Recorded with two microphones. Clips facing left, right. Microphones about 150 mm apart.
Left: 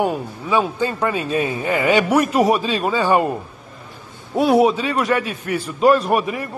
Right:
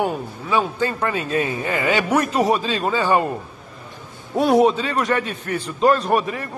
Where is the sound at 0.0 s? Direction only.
15° left (ahead or behind).